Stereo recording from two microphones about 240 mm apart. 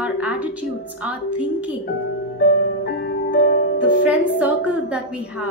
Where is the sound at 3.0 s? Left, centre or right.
Left.